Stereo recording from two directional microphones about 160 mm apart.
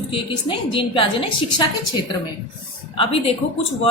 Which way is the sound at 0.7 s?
30° left (ahead or behind).